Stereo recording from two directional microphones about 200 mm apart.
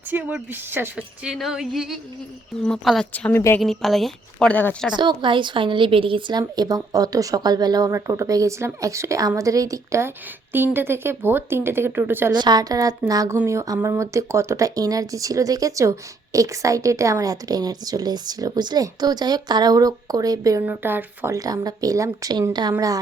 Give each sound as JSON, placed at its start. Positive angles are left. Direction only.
{"t": 0.1, "sound": "a woman's voice", "side_deg": -5}
{"t": 4.9, "sound": "a woman's voice", "side_deg": -25}
{"t": 12.3, "sound": "speech", "side_deg": -20}